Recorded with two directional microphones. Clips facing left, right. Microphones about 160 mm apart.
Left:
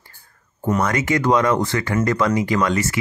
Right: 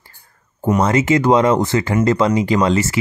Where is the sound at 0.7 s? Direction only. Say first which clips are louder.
Right 6 dB; 25° right (ahead or behind).